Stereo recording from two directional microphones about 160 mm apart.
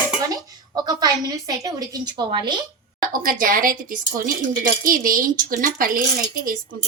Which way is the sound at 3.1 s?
60° right (ahead or behind).